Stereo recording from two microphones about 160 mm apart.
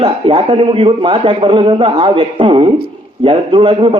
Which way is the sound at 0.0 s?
35° right (ahead or behind).